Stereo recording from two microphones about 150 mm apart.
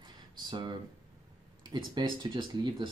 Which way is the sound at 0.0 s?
30° right (ahead or behind).